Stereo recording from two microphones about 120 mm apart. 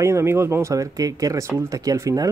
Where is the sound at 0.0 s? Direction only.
20° right (ahead or behind).